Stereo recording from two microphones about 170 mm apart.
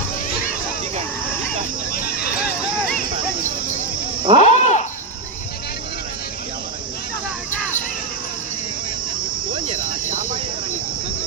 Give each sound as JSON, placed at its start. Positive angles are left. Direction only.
{"t": 1.9, "sound": "a sound", "side_deg": 65}
{"t": 4.4, "sound": "cricket", "side_deg": 40}
{"t": 9.5, "sound": "cricket", "side_deg": -30}
{"t": 9.8, "sound": "cricket", "side_deg": -50}